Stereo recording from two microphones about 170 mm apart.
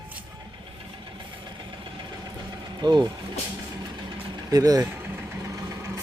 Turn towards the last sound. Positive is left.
turn(degrees=-15)  # may be behind; listen again after turning